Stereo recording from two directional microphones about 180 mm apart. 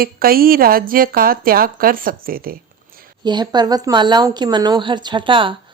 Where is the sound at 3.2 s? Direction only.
25° right (ahead or behind).